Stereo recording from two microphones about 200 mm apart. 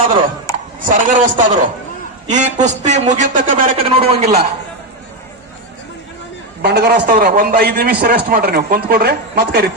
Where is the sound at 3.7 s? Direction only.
30° right (ahead or behind).